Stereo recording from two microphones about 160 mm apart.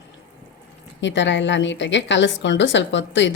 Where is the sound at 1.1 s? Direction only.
90° left.